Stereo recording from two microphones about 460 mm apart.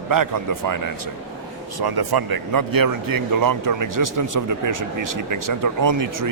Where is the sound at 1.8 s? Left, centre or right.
Right.